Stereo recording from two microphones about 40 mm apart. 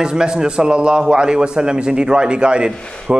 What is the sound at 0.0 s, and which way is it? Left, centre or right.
A man's voice, centre.